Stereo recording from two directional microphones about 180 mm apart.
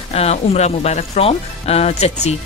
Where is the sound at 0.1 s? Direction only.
35° left (ahead or behind).